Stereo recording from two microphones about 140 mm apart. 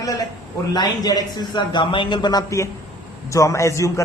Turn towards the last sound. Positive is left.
turn(degrees=20)  # may be behind; listen again after turning